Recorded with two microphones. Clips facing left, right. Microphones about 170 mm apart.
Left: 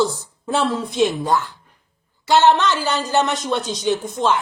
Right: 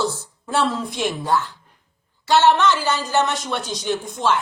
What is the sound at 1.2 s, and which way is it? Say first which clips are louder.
A woman's voice: left 1 dB; 10° left (ahead or behind).